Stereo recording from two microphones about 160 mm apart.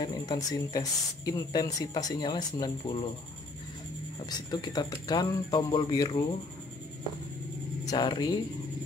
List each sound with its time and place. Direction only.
0.0 s speech: 25° left (ahead or behind)
4.3 s speech: 25° left (ahead or behind)
7.8 s speech: 25° left (ahead or behind)